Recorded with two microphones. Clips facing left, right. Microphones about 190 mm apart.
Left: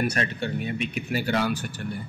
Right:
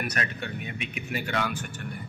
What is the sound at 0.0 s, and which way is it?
Speech, 30° left (ahead or behind).